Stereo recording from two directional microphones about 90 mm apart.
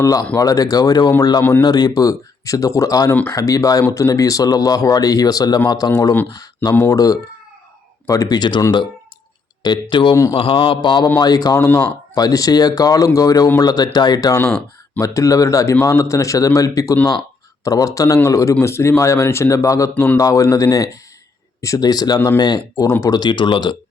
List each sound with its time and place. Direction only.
0.0 s speech: 40° left (ahead or behind)
1.4 s speech: 25° left (ahead or behind)
1.6 s speech: 50° left (ahead or behind)
9.6 s speech: 55° left (ahead or behind)
10.3 s a man's voice: 85° left; by 11.8 s 35° left (ahead or behind)
12.1 s speech: 45° left (ahead or behind); by 23.7 s 60° left (ahead or behind)